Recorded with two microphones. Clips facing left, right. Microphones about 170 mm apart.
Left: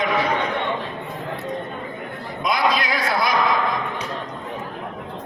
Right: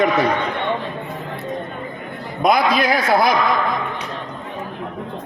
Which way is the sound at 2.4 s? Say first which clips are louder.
Right 5 dB; 55° right (ahead or behind).